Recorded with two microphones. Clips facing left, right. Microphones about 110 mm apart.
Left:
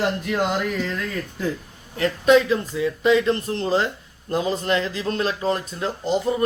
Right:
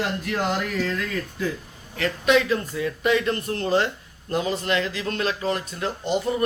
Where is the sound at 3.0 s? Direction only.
25° left (ahead or behind).